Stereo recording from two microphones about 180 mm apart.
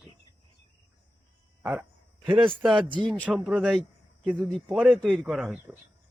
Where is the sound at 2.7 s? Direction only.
30° right (ahead or behind).